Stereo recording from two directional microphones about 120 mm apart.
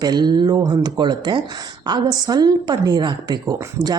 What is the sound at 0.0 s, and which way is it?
A woman's voice, 35° right (ahead or behind).